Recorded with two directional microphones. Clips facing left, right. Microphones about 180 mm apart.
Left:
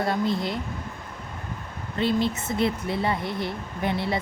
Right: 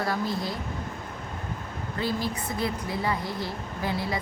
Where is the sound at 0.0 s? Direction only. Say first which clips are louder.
Left 4 dB; 25° left (ahead or behind).